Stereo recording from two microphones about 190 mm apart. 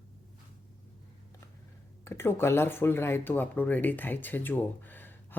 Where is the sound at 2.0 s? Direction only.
15° left (ahead or behind).